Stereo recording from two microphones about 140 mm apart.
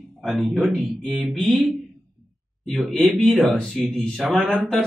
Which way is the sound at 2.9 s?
5° left (ahead or behind).